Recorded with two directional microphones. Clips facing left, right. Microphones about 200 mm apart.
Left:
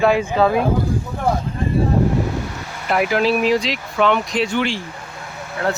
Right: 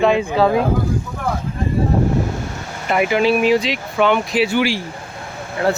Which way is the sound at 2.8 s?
Centre (ahead or behind).